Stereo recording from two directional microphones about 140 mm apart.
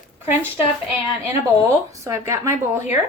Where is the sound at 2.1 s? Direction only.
20° right (ahead or behind).